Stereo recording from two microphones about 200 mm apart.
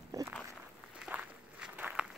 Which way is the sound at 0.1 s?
15° right (ahead or behind).